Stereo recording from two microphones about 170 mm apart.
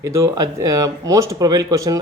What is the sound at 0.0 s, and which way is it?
Speech, 15° right (ahead or behind).